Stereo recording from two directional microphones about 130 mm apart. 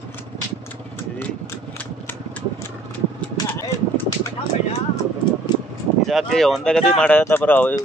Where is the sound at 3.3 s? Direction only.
20° left (ahead or behind).